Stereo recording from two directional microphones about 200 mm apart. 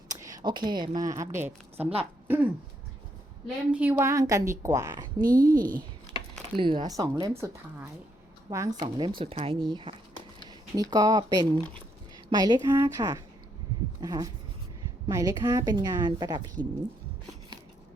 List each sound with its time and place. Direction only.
0.1 s a woman's voice: 15° right (ahead or behind)
5.2 s a woman's voice: 45° right (ahead or behind)
6.6 s a woman's voice: 25° right (ahead or behind)